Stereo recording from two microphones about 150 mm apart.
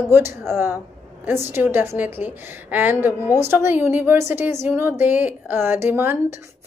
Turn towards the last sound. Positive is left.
turn(degrees=-15)  # may be behind; listen again after turning